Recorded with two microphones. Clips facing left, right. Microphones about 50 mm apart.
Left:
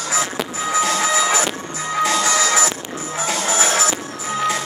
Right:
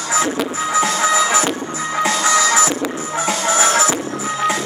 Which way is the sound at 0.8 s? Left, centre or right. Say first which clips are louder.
Right 2 dB; centre.